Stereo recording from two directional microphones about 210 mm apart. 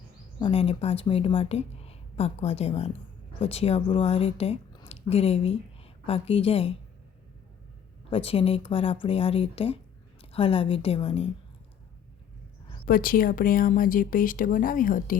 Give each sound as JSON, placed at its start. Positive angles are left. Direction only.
{"t": 0.3, "sound": "speech", "side_deg": 25}
{"t": 8.1, "sound": "speech", "side_deg": 25}
{"t": 12.8, "sound": "speech", "side_deg": 45}